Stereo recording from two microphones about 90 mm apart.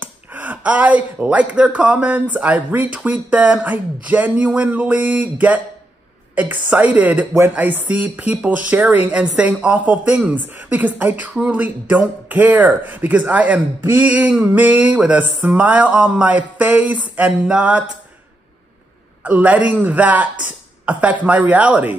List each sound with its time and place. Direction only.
0.0 s speech: 20° right (ahead or behind)
19.2 s speech: 15° right (ahead or behind)